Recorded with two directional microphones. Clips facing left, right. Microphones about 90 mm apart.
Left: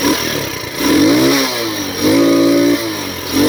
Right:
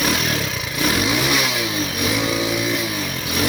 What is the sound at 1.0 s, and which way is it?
Vehicle, 45° left (ahead or behind).